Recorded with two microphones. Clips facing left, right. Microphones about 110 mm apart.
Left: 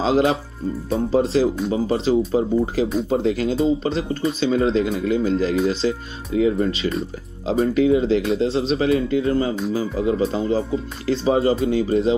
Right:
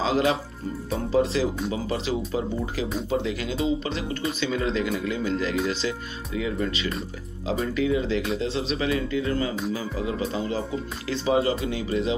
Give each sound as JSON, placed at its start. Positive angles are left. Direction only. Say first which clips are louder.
{"t": 0.0, "sound": "speech", "louder": "left 5 dB", "side_deg": 35}